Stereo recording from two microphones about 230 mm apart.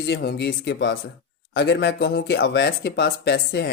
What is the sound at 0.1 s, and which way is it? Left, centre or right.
Speech, left.